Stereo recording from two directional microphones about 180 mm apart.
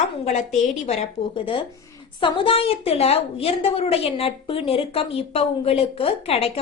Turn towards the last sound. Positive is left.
turn(degrees=35)  # may be behind; listen again after turning